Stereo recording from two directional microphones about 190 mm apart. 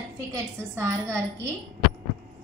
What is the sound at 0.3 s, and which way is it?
Speech, 15° right (ahead or behind).